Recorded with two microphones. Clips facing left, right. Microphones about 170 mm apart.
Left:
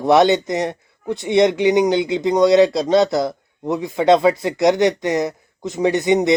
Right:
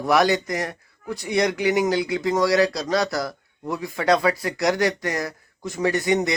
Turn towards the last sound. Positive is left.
turn(degrees=20)  # may be behind; listen again after turning